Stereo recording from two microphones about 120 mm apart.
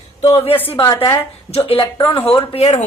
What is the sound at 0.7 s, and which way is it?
Speech, 45° left (ahead or behind).